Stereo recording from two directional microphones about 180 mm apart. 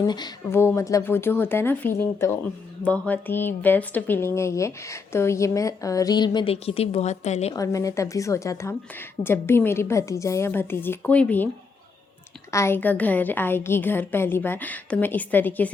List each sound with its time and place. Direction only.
0.0 s speech: 20° left (ahead or behind); by 7.5 s 40° left (ahead or behind)
7.5 s speech: 20° left (ahead or behind)
12.5 s speech: 15° left (ahead or behind)